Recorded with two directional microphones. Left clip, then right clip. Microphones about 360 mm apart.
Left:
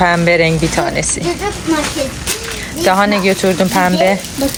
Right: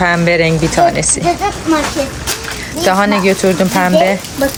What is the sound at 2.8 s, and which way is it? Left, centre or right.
A child's voice, centre.